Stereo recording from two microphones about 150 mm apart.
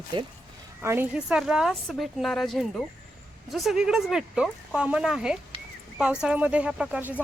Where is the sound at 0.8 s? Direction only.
15° right (ahead or behind).